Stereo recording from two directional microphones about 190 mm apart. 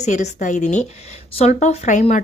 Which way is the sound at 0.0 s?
40° left (ahead or behind).